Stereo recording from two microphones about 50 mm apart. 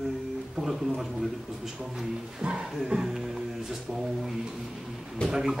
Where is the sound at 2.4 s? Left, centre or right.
Centre.